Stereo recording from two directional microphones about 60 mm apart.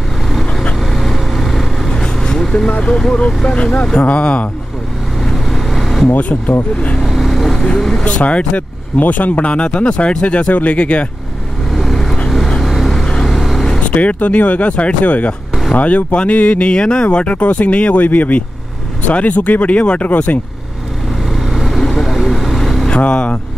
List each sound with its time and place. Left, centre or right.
0.3 s vehicle: centre
2.7 s speech: left
5.2 s vehicle: centre
6.0 s speech: left
7.0 s vehicle: centre
8.0 s speech: left
11.7 s vehicle: centre
13.7 s speech: left
21.3 s vehicle: centre
22.8 s speech: centre